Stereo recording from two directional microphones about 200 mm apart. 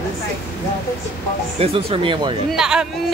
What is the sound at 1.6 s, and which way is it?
Speech, 30° right (ahead or behind).